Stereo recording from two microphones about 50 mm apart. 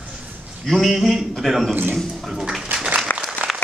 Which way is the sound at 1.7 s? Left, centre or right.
Right.